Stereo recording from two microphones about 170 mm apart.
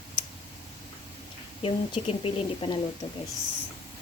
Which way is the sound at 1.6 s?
35° left (ahead or behind).